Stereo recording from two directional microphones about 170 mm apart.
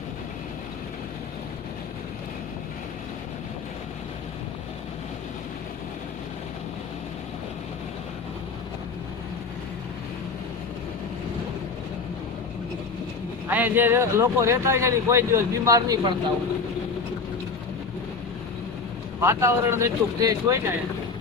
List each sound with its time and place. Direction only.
13.5 s speech: 10° right (ahead or behind)
19.2 s speech: 15° right (ahead or behind)